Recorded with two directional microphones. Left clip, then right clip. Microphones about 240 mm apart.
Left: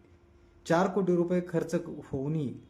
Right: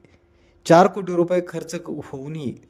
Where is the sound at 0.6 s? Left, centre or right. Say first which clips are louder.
Right 12 dB; right.